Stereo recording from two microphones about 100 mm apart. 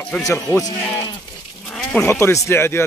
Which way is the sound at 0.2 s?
30° left (ahead or behind).